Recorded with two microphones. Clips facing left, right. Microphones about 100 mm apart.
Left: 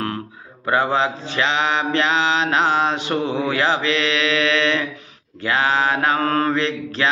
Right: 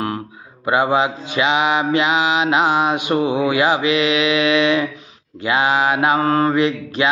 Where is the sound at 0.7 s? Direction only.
15° right (ahead or behind).